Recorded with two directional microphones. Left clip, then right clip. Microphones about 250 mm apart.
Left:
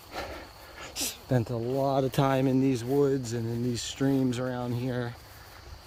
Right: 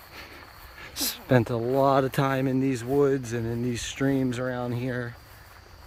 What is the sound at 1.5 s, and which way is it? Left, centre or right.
Speech, right.